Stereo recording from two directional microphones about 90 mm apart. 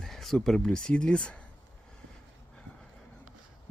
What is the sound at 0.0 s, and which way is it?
Speech, 5° left (ahead or behind).